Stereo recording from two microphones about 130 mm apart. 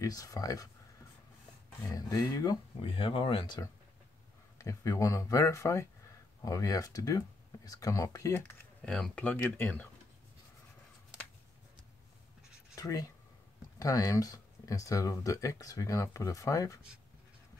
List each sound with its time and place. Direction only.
0.0 s speech: 25° left (ahead or behind)
1.9 s speech: 30° left (ahead or behind)
2.8 s speech: 45° left (ahead or behind)
4.6 s speech: 25° left (ahead or behind)
8.8 s speech: 5° left (ahead or behind)
12.7 s speech: 25° left (ahead or behind)